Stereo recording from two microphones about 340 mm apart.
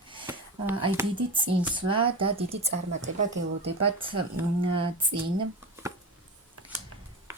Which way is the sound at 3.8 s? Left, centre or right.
Centre.